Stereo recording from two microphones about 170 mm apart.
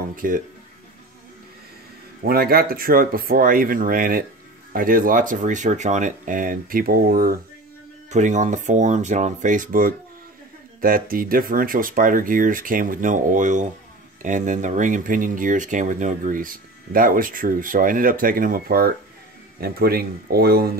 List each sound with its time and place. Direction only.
0.1 s speech: 55° right (ahead or behind)
2.2 s speech: 60° right (ahead or behind)
8.1 s speech: 45° right (ahead or behind); by 20.7 s 65° right (ahead or behind)